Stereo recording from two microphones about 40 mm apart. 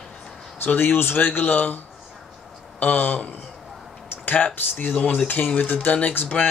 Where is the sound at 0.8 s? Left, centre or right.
Left.